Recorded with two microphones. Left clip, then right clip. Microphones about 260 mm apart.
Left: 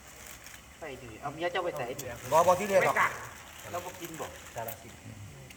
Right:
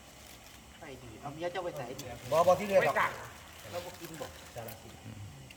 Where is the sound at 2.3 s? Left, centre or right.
Centre.